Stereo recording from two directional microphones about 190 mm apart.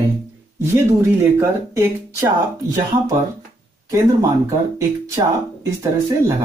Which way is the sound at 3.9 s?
15° right (ahead or behind).